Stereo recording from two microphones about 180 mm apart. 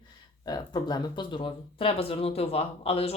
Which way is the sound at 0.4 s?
20° left (ahead or behind).